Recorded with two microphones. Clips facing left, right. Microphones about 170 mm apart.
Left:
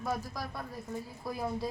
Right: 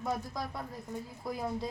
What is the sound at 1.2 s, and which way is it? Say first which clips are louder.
Speech: right 1 dB; 20° right (ahead or behind).